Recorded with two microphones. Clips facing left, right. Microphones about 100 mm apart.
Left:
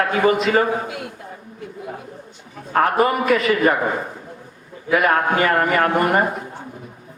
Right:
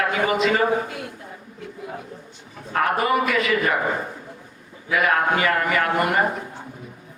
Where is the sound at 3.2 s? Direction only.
35° left (ahead or behind).